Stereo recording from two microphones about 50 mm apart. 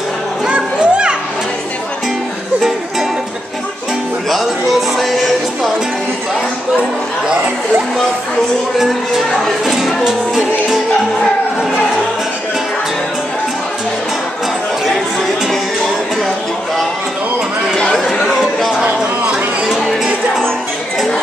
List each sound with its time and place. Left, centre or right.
0.5 s children playing: right
4.7 s music: centre
9.7 s music: centre